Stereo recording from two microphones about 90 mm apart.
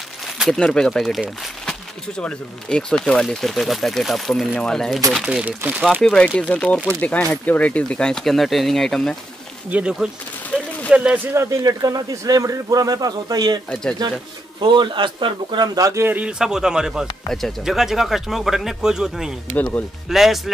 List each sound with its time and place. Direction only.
0.6 s speech: 5° left (ahead or behind)
5.2 s speech: 15° right (ahead or behind)
6.0 s speech: 10° left (ahead or behind)
9.7 s speech: 15° right (ahead or behind)
10.5 s a sound: centre (ahead or behind)
10.9 s speech: 15° right (ahead or behind)
11.3 s a man's voice: 40° right (ahead or behind)
16.1 s speech: 15° right (ahead or behind)
19.5 s speech: 20° left (ahead or behind)
20.1 s speech: 5° right (ahead or behind)